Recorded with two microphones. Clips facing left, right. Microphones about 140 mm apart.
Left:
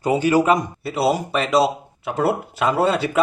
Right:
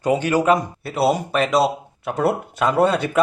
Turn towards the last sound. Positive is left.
turn(degrees=0)  # may be behind; listen again after turning